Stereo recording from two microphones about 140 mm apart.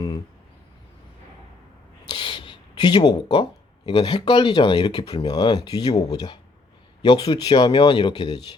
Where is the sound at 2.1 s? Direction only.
35° left (ahead or behind).